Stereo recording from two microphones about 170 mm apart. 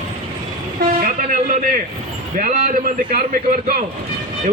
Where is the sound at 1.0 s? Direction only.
55° right (ahead or behind).